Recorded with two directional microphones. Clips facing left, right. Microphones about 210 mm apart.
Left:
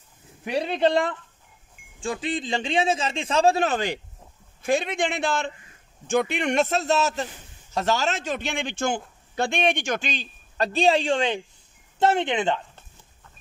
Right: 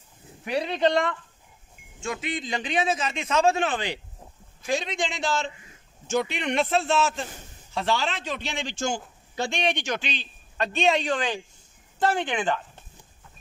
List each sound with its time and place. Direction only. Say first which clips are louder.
2.0 s a man's voice: left 3 dB; 30° left (ahead or behind)
4.6 s a man's voice: left 4 dB; 55° left (ahead or behind); by 12.6 s 25° left (ahead or behind)